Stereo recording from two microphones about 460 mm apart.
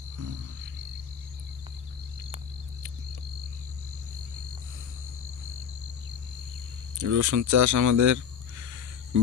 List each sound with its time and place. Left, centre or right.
7.0 s speech: right